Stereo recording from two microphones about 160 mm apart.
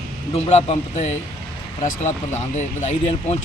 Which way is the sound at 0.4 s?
45° left (ahead or behind).